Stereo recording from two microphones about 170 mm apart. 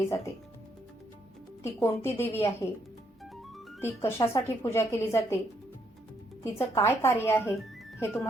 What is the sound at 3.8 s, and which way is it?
Speech, 15° left (ahead or behind).